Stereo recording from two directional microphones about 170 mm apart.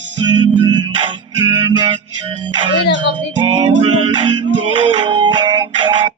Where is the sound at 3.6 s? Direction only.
30° right (ahead or behind).